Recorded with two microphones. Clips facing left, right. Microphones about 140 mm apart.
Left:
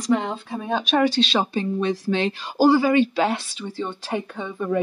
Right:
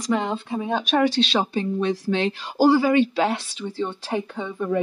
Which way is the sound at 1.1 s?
65° right (ahead or behind).